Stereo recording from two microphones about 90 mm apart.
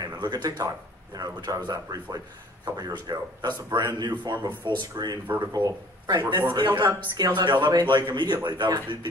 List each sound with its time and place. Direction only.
0.0 s a man's voice: 50° right (ahead or behind)